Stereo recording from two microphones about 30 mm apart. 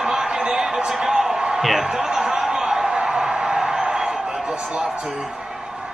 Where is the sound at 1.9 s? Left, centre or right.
Centre.